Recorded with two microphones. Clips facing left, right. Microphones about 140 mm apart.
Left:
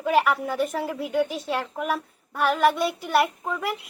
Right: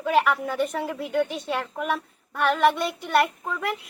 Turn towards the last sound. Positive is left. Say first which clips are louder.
# even
turn(degrees=5)  # may be behind; listen again after turning